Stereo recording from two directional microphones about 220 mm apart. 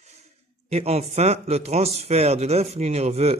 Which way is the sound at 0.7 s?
30° right (ahead or behind).